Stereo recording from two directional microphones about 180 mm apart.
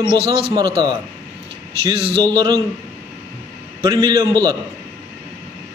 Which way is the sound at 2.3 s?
20° right (ahead or behind).